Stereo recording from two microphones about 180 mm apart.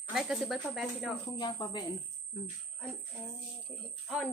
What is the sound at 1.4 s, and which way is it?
Speech, 25° left (ahead or behind).